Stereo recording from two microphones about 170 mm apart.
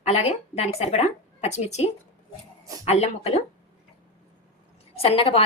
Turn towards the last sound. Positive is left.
turn(degrees=35)  # may be behind; listen again after turning